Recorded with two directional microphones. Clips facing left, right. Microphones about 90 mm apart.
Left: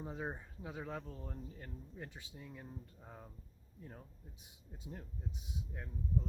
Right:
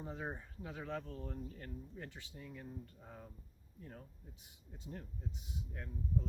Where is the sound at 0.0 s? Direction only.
10° left (ahead or behind).